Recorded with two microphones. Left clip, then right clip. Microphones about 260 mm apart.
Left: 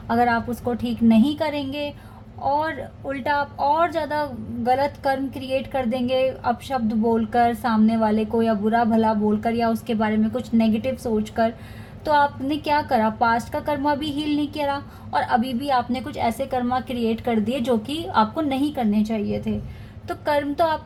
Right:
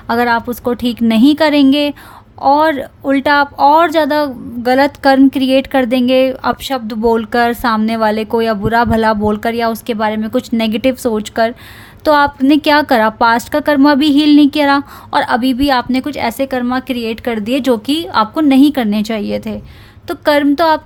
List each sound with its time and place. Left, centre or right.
0.1 s a woman's voice: right
12.0 s a woman's voice: right
16.5 s a woman's voice: right
16.8 s a woman's voice: right